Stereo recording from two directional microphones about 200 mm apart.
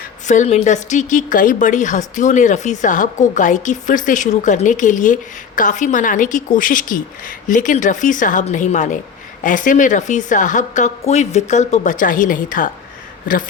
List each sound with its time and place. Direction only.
0.3 s a woman's voice: 35° left (ahead or behind)